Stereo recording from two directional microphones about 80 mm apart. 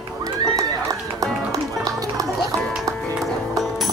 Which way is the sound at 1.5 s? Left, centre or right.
Right.